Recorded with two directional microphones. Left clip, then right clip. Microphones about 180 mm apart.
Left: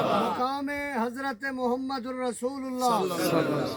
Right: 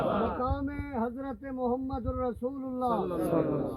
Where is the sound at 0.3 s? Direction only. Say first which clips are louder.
Left 4 dB; 55° left (ahead or behind).